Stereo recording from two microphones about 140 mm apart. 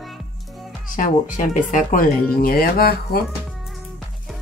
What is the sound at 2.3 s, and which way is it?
Speech, 90° left.